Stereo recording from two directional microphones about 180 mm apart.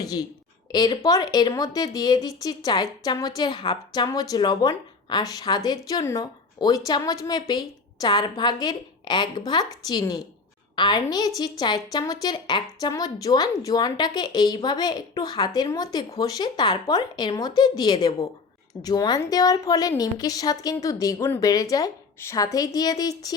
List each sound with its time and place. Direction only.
0.0 s a woman's voice: 20° left (ahead or behind)